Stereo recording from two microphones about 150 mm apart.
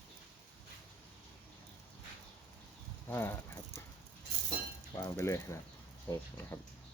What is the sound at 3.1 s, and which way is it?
Speech, 15° left (ahead or behind).